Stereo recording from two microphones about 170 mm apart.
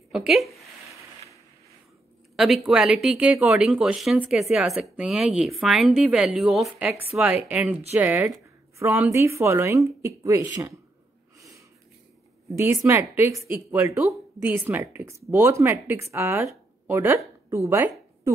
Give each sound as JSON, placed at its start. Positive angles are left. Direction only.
{"t": 0.1, "sound": "speech", "side_deg": 0}
{"t": 2.3, "sound": "speech", "side_deg": 0}
{"t": 11.3, "sound": "snort", "side_deg": -20}
{"t": 12.5, "sound": "speech", "side_deg": -15}
{"t": 13.3, "sound": "speech", "side_deg": 0}
{"t": 13.7, "sound": "speech", "side_deg": -15}
{"t": 17.5, "sound": "a sound", "side_deg": -15}